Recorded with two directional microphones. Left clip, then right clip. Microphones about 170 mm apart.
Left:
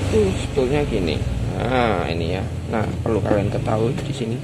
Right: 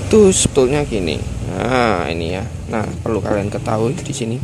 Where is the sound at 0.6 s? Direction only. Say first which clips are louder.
Right 5 dB; 30° right (ahead or behind).